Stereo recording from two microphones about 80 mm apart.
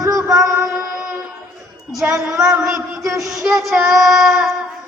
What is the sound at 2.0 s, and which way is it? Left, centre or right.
Child singing, centre.